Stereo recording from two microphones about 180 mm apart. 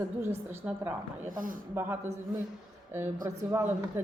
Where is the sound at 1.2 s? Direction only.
50° right (ahead or behind).